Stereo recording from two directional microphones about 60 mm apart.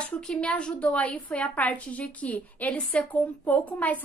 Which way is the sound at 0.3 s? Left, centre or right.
Centre.